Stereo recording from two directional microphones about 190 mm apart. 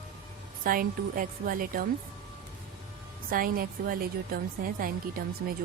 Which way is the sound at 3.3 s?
50° right (ahead or behind).